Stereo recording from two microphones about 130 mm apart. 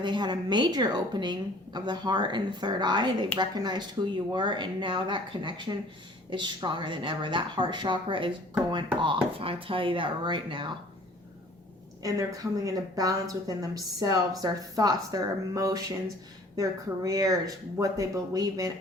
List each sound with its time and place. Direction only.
0.0 s a woman's voice: 35° right (ahead or behind)
12.0 s speech: 25° right (ahead or behind)